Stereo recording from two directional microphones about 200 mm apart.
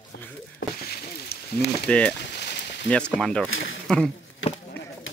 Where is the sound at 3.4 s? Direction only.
75° left (ahead or behind).